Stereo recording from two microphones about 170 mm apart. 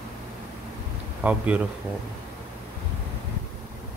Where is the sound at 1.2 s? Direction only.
10° right (ahead or behind).